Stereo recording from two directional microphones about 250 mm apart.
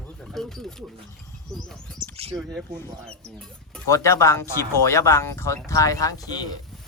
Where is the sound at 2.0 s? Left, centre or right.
Right.